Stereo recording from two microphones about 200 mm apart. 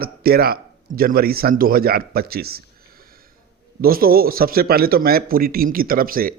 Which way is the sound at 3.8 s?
45° right (ahead or behind).